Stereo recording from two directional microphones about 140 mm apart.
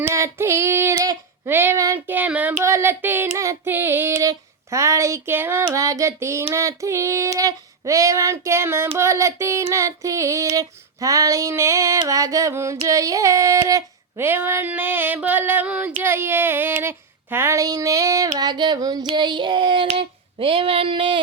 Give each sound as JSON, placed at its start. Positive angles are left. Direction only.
{"t": 0.0, "sound": "female singing", "side_deg": -20}
{"t": 2.1, "sound": "a sound", "side_deg": -10}
{"t": 5.6, "sound": "female singing", "side_deg": -25}
{"t": 12.9, "sound": "a sound", "side_deg": -25}
{"t": 18.3, "sound": "female singing", "side_deg": -30}
{"t": 19.0, "sound": "child singing", "side_deg": -35}